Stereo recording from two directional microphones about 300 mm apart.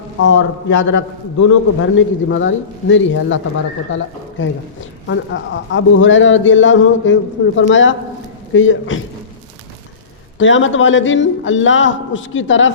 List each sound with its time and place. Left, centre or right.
0.2 s speech: left
0.7 s a man's voice: left
1.8 s speech: left
10.3 s speech: left